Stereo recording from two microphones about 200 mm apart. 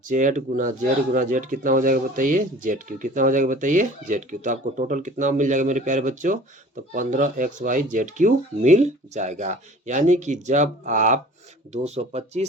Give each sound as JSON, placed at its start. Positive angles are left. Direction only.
{"t": 0.1, "sound": "speech", "side_deg": -40}